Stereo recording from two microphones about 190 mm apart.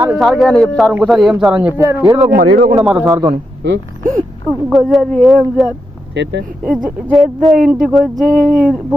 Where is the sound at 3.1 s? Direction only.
20° right (ahead or behind).